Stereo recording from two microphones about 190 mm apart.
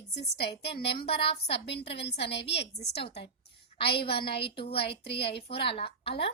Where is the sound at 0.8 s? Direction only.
30° left (ahead or behind).